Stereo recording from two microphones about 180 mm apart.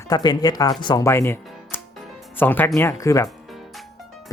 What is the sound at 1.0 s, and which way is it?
Music, 15° left (ahead or behind).